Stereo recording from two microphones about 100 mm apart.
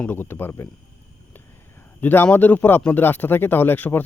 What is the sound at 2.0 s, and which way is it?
Speech, 20° left (ahead or behind).